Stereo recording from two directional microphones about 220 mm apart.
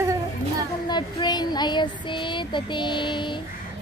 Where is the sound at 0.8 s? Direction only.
20° left (ahead or behind).